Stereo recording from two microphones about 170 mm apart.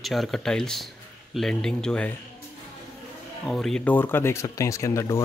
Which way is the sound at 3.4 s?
Centre (ahead or behind).